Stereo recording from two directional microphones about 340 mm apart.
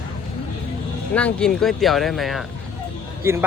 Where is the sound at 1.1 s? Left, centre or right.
Centre.